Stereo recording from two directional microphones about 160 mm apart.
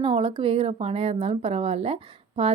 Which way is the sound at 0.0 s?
35° right (ahead or behind).